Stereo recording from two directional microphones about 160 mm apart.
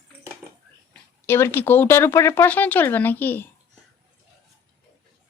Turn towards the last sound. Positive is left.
turn(degrees=10)  # may be behind; listen again after turning